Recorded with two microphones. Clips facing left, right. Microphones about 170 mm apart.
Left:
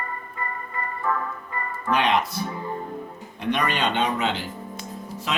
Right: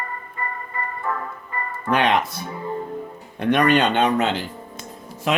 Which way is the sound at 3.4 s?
55° right (ahead or behind).